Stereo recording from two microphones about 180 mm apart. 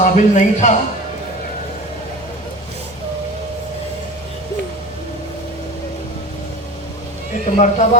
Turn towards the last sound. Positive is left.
turn(degrees=40)  # may be behind; listen again after turning